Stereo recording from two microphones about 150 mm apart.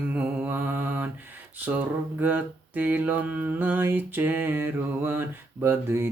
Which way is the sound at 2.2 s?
10° right (ahead or behind).